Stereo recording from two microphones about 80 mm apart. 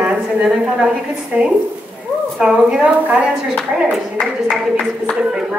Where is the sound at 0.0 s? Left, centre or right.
Centre.